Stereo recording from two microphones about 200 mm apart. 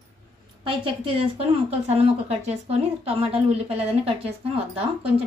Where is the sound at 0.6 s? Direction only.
25° right (ahead or behind).